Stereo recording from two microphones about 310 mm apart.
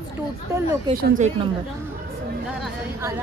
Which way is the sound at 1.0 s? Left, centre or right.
Right.